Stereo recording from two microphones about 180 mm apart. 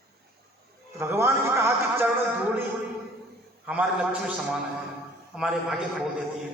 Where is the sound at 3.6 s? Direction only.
5° right (ahead or behind).